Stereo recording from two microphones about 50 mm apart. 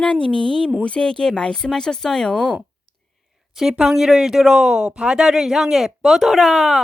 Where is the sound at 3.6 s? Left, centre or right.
Centre.